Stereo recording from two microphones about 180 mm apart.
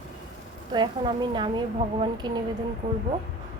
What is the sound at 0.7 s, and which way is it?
A woman's voice, 25° right (ahead or behind).